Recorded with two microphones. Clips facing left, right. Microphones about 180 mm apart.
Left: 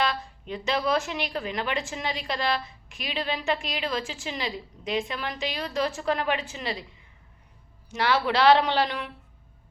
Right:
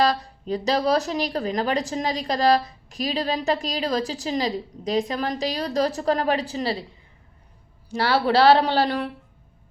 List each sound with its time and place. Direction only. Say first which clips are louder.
0.0 s speech: right 6 dB; 40° right (ahead or behind)
7.9 s speech: right 4 dB; 35° right (ahead or behind)